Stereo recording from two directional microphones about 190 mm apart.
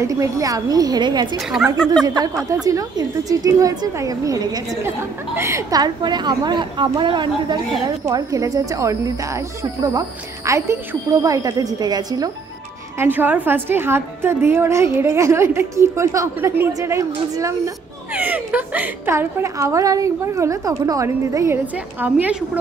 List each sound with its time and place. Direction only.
0.0 s a woman's voice: 15° right (ahead or behind)
13.0 s a woman's voice: 10° right (ahead or behind)